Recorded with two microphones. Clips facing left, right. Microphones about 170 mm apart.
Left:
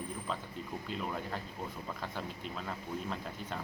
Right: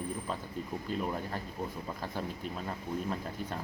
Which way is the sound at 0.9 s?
45° right (ahead or behind).